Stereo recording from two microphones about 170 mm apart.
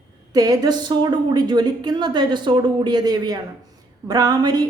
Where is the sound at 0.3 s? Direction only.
20° right (ahead or behind).